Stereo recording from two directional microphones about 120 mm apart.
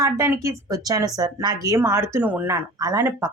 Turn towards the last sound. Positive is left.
turn(degrees=-30)  # may be behind; listen again after turning